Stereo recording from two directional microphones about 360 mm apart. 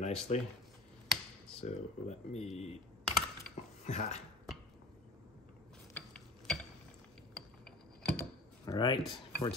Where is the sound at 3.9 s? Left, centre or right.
Centre.